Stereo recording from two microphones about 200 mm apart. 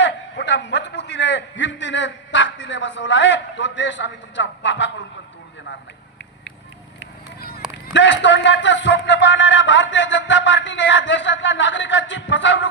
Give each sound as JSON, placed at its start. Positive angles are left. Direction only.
{"t": 0.0, "sound": "a man's voice", "side_deg": 65}
{"t": 7.3, "sound": "run", "side_deg": 50}
{"t": 7.9, "sound": "a man's voice", "side_deg": 65}